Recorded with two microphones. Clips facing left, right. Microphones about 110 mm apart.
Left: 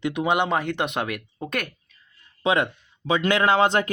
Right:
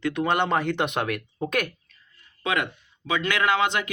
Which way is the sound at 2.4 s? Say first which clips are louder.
Left 5 dB; 30° left (ahead or behind).